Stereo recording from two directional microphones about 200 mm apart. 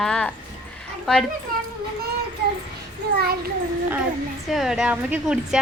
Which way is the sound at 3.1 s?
50° right (ahead or behind).